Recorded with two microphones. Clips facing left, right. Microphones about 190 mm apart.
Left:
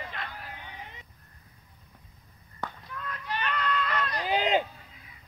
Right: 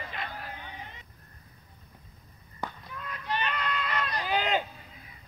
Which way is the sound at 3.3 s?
20° right (ahead or behind).